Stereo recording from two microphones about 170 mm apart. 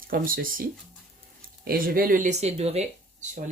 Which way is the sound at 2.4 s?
35° right (ahead or behind).